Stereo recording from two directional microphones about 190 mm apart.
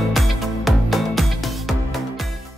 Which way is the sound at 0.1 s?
Centre (ahead or behind).